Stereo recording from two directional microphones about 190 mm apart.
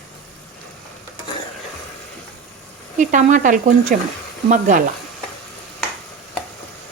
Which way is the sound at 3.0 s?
40° right (ahead or behind).